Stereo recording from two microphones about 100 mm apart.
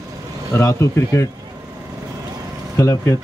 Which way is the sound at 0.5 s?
25° left (ahead or behind).